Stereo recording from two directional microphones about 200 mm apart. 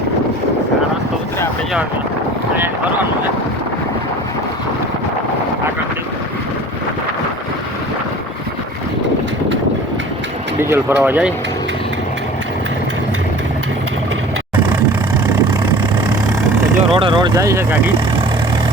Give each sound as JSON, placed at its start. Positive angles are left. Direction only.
{"t": 10.6, "sound": "speech", "side_deg": -10}
{"t": 16.9, "sound": "speech", "side_deg": -25}
{"t": 17.3, "sound": "speech", "side_deg": -15}